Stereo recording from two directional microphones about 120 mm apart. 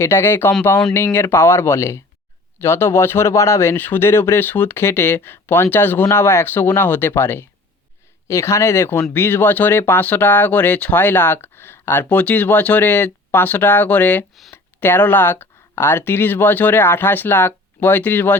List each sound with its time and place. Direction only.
0.0 s speech: 20° left (ahead or behind)